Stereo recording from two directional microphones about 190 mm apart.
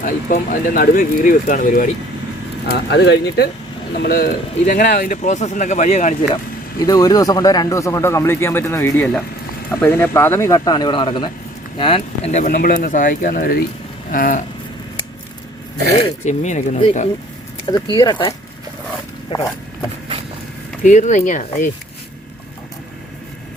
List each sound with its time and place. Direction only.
0.0 s speech: 45° left (ahead or behind)
2.6 s speech: 60° left (ahead or behind); by 6.4 s 35° left (ahead or behind)
6.7 s speech: 20° left (ahead or behind); by 14.4 s 45° left (ahead or behind)
16.2 s speech: 35° left (ahead or behind)
17.8 s speech: 25° left (ahead or behind)
20.8 s speech: 40° left (ahead or behind)